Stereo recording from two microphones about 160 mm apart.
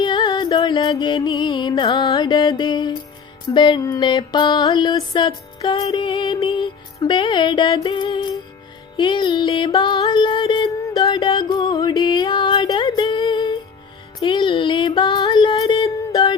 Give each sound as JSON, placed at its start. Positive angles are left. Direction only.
{"t": 0.0, "sound": "music", "side_deg": 30}